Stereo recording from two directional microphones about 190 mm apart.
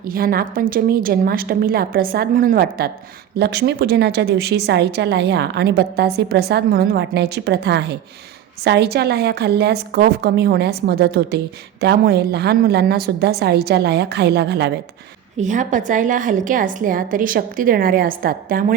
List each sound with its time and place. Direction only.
0.0 s a woman's voice: 50° right (ahead or behind)
15.4 s a woman's voice: 40° right (ahead or behind)